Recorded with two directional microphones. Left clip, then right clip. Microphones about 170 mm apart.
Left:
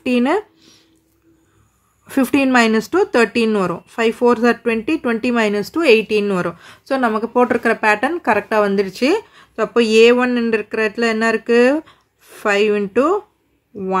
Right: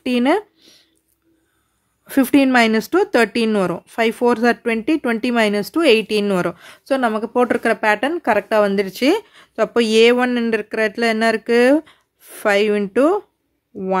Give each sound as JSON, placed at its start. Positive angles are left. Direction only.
{"t": 0.0, "sound": "speech", "side_deg": -30}
{"t": 2.0, "sound": "speech", "side_deg": -25}